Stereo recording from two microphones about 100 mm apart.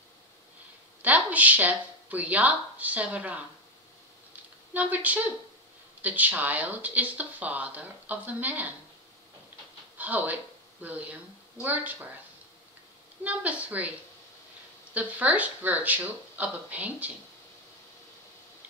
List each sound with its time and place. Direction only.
1.0 s speech: 15° right (ahead or behind)
4.7 s speech: 15° right (ahead or behind)
9.9 s speech: 15° right (ahead or behind)
13.2 s speech: 15° right (ahead or behind)
15.0 s speech: 15° right (ahead or behind)